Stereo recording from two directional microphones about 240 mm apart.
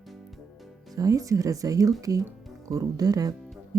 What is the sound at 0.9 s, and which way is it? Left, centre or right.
Speech, centre.